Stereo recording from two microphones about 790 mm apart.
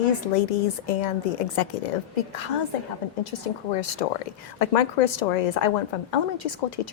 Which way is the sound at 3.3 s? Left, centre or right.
Left.